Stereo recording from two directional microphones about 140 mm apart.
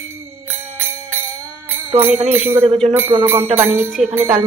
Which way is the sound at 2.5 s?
45° right (ahead or behind).